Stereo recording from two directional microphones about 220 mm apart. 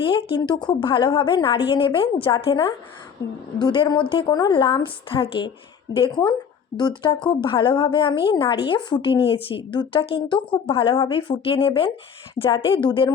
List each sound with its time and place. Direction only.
0.0 s a woman's voice: 25° left (ahead or behind)